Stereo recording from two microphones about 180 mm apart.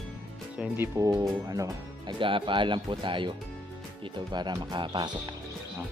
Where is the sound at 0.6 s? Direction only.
15° right (ahead or behind).